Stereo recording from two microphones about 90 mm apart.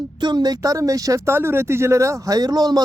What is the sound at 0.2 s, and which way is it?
Speech, 55° right (ahead or behind).